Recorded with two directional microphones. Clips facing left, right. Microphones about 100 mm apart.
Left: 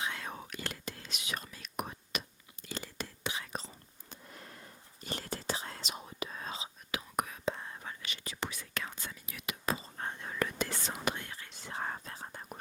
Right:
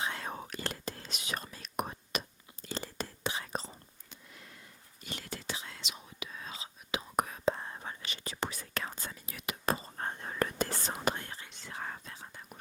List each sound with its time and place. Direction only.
0.0 s whispering: 35° right (ahead or behind)
4.1 s whispering: 40° left (ahead or behind)
6.9 s whispering: 35° right (ahead or behind)
11.7 s whispering: 40° left (ahead or behind)